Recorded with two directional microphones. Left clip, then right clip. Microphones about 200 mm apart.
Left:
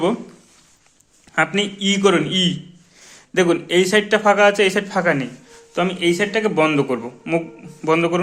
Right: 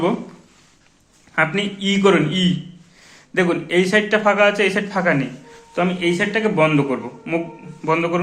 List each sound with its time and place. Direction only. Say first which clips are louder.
1.4 s a man's voice: even; 55° left (ahead or behind)